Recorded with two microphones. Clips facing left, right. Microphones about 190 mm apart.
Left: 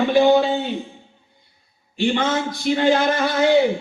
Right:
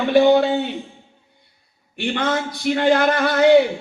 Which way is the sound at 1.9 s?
60° right (ahead or behind).